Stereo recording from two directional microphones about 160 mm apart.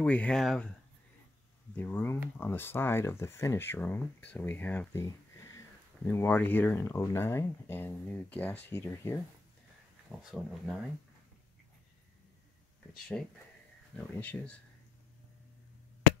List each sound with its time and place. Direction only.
0.0 s speech: 5° left (ahead or behind)
1.8 s speech: 10° left (ahead or behind)
5.0 s a sound: 20° left (ahead or behind)
6.0 s speech: 15° left (ahead or behind)
10.2 s speech: centre (ahead or behind)
13.9 s speech: 10° left (ahead or behind)